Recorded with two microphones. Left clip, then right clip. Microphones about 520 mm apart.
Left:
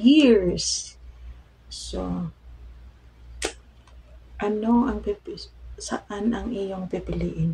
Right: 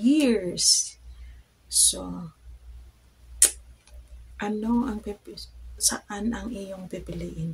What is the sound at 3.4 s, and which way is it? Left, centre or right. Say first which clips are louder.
Tick-tock: right 4 dB; right.